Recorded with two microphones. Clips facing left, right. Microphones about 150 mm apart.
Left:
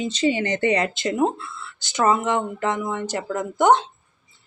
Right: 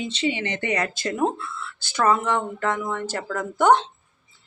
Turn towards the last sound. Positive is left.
turn(degrees=15)  # may be behind; listen again after turning